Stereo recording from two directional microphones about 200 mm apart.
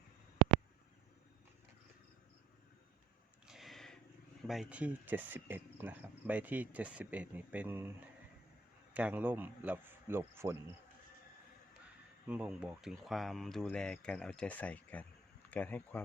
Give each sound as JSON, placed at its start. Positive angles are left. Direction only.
{"t": 3.4, "sound": "a sound", "side_deg": 0}
{"t": 4.4, "sound": "speech", "side_deg": -5}
{"t": 12.3, "sound": "speech", "side_deg": -5}